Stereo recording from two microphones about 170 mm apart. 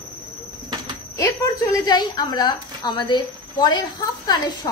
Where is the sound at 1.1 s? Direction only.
20° left (ahead or behind).